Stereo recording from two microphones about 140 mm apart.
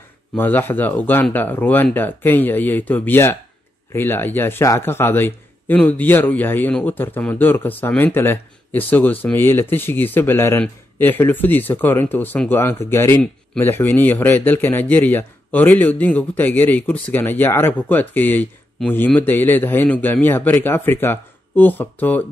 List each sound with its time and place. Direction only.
0.3 s a man's voice: 15° left (ahead or behind)